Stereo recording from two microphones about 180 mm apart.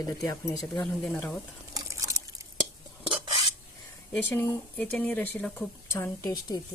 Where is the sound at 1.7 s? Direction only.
15° right (ahead or behind).